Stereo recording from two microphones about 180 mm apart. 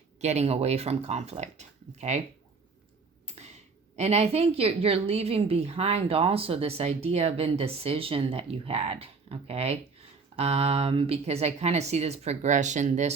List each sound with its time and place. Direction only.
0.2 s a woman's voice: 40° right (ahead or behind)
3.9 s a woman's voice: 35° right (ahead or behind)